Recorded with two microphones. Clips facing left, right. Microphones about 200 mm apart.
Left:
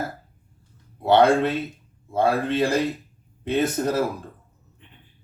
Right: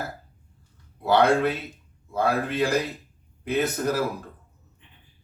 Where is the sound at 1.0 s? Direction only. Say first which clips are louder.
Left 3 dB; 25° left (ahead or behind).